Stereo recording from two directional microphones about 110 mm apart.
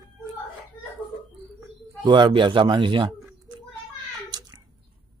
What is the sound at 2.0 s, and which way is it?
A man's voice, 45° right (ahead or behind).